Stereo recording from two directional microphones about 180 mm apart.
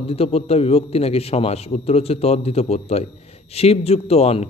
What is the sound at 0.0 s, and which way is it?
Speech, 35° left (ahead or behind).